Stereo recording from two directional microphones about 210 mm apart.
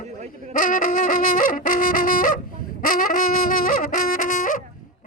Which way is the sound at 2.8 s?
40° left (ahead or behind).